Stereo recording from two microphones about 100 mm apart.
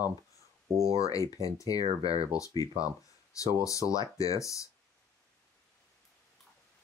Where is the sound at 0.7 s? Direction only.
35° left (ahead or behind).